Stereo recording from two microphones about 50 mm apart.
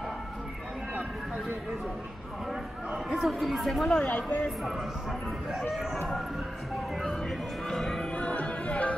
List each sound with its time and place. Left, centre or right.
3.2 s speech: centre
4.0 s speech: left
5.6 s speech: centre
7.0 s music: centre
8.1 s music: left